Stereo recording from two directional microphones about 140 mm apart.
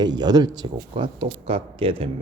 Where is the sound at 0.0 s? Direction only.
30° right (ahead or behind).